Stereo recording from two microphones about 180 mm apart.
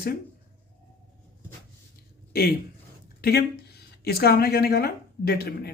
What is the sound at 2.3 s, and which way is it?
Speech, 60° left (ahead or behind).